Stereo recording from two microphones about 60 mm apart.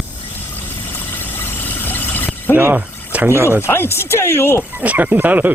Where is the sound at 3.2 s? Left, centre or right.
Right.